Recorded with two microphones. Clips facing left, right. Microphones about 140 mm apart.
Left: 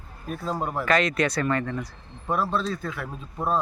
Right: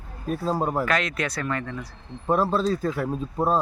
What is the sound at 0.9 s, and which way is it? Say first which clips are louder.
Speech: left 3 dB; centre (ahead or behind).